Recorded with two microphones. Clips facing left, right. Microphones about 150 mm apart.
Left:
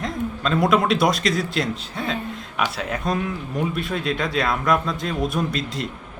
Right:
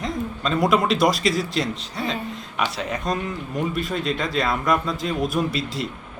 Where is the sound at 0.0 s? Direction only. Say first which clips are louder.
Left 1 dB; centre (ahead or behind).